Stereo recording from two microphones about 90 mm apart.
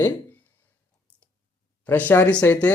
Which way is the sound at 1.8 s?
20° left (ahead or behind).